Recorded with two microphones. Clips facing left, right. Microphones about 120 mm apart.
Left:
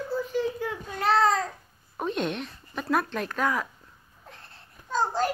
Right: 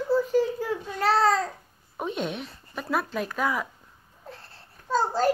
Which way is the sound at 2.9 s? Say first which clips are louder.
Left 1 dB; 5° right (ahead or behind).